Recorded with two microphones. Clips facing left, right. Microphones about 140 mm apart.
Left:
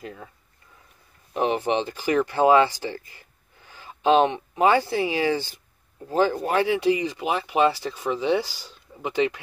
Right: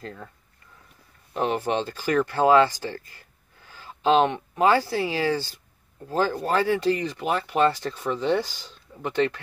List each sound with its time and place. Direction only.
0.0 s speech: 15° left (ahead or behind)
1.3 s speech: 15° left (ahead or behind)